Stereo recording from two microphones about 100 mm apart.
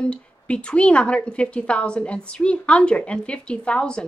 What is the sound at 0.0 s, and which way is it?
Speech, 10° left (ahead or behind).